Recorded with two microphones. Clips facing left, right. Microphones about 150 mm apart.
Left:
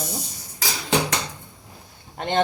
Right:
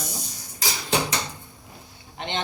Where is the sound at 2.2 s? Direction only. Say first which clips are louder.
Left 8 dB; 45° left (ahead or behind).